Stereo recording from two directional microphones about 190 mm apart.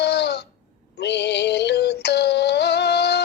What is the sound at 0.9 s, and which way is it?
Synthetic singing, 60° left (ahead or behind).